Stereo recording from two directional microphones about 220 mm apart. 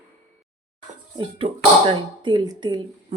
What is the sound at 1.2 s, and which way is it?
Speech, 25° right (ahead or behind).